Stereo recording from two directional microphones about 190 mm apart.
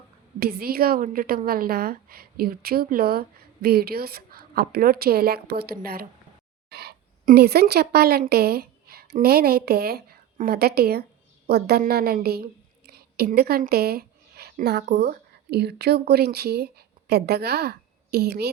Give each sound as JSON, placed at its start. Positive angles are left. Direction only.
{"t": 0.3, "sound": "a woman's voice", "side_deg": -55}